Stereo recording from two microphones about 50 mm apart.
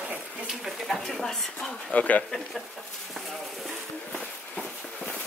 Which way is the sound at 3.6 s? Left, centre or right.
Centre.